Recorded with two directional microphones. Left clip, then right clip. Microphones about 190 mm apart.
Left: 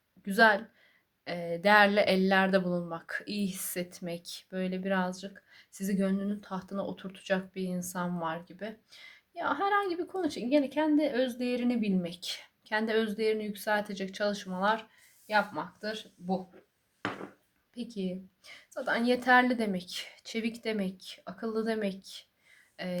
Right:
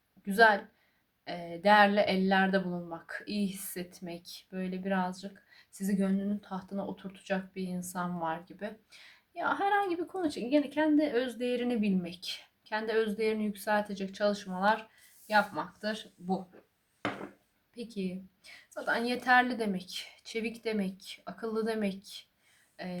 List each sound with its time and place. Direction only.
0.3 s a woman's voice: 30° left (ahead or behind)
17.7 s a woman's voice: 30° left (ahead or behind)
22.8 s a woman's voice: 35° left (ahead or behind)